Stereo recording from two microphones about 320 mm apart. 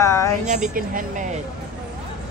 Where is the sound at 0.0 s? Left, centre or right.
Centre.